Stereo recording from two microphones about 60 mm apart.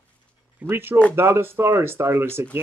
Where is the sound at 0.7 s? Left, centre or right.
Right.